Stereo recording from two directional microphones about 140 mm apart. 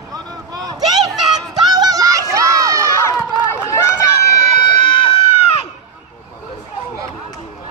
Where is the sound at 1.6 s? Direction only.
30° right (ahead or behind).